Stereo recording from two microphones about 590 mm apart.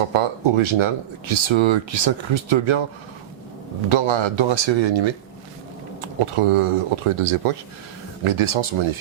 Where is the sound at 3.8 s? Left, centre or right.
Right.